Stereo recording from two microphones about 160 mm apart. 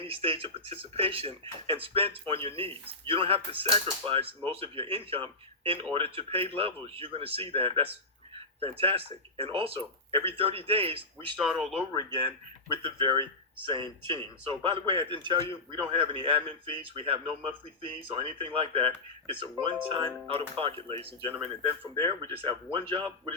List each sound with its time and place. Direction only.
0.0 s speech: 35° right (ahead or behind)
11.4 s speech: 5° right (ahead or behind)
12.8 s speech: 30° right (ahead or behind)